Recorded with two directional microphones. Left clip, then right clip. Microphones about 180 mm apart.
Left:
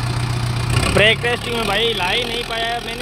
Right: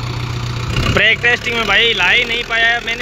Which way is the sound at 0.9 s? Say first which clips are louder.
Right 3 dB; centre (ahead or behind).